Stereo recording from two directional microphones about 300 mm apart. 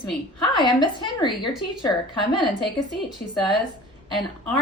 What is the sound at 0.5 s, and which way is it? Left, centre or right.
Speech, centre.